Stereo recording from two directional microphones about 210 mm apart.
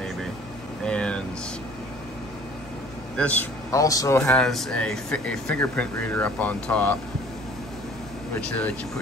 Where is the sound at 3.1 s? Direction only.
5° left (ahead or behind).